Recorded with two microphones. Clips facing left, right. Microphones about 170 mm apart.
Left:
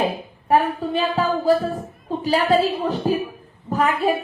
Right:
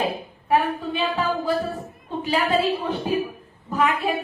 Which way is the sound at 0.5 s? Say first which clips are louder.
Left 3 dB; 40° left (ahead or behind).